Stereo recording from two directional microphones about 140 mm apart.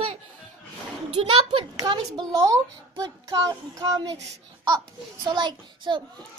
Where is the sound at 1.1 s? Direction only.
40° right (ahead or behind).